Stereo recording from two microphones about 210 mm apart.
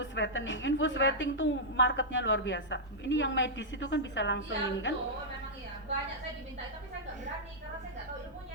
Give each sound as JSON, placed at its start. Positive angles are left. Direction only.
{"t": 0.0, "sound": "a woman's voice", "side_deg": 60}